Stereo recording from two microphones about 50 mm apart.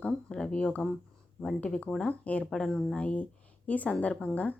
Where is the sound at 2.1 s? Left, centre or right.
Left.